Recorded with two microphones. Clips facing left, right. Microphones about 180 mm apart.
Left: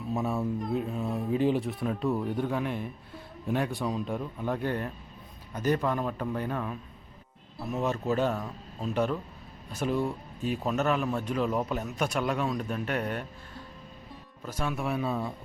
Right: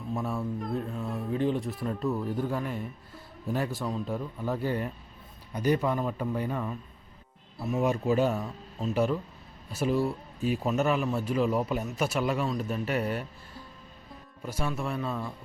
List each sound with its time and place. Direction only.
0.2 s speech: centre (ahead or behind)
0.8 s speech: 15° left (ahead or behind)
1.6 s speech: centre (ahead or behind)
14.4 s speech: 10° right (ahead or behind)
14.7 s speech: 5° left (ahead or behind)